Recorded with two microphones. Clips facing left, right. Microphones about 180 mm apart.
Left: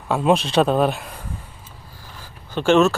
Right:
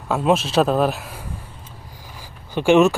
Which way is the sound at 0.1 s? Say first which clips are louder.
Even; centre (ahead or behind).